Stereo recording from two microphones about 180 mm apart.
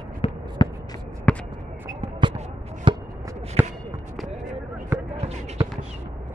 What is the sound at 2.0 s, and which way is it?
Basketball bounce, 30° right (ahead or behind).